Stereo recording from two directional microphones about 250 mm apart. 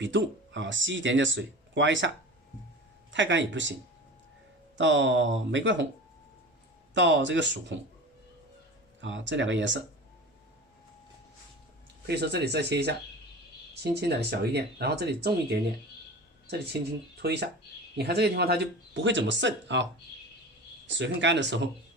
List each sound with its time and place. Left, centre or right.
0.0 s speech: right
3.1 s speech: right
4.8 s speech: right
6.9 s speech: right
9.0 s speech: right
12.0 s speech: right
17.2 s speech: right
21.0 s speech: right